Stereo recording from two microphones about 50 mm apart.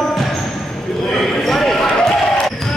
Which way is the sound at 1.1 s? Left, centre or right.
Centre.